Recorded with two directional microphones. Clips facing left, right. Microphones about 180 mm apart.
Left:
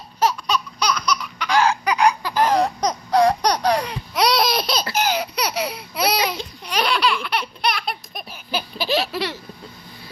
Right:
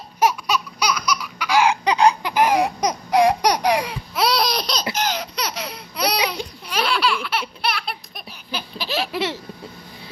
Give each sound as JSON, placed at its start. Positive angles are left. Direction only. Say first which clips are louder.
{"t": 0.2, "sound": "laughter", "louder": "right 1 dB", "side_deg": -10}
{"t": 1.9, "sound": "a sound", "louder": "right 2 dB", "side_deg": -25}
{"t": 2.3, "sound": "laughter", "louder": "even", "side_deg": -10}
{"t": 4.9, "sound": "baby laughter", "louder": "left 3 dB", "side_deg": 10}
{"t": 8.3, "sound": "a sound", "louder": "left 4 dB", "side_deg": 5}
{"t": 9.0, "sound": "baby laughter", "louder": "right 1 dB", "side_deg": -20}